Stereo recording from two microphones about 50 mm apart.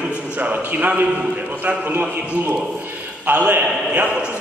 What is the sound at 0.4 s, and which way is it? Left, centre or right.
A man's voice, right.